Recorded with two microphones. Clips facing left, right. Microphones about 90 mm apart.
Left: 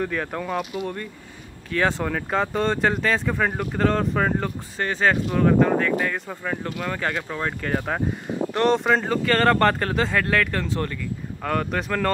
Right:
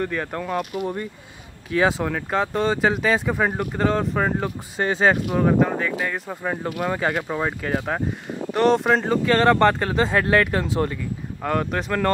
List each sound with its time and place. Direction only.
0.0 s speech: centre (ahead or behind)
4.7 s speech: 15° right (ahead or behind)
6.4 s speech: 15° right (ahead or behind)
10.1 s speech: 15° right (ahead or behind)
11.4 s speech: 5° right (ahead or behind)